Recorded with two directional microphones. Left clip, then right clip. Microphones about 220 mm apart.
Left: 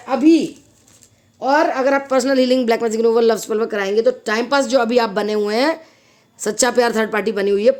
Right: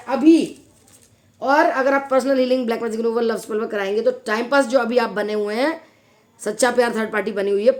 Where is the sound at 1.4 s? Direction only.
25° left (ahead or behind).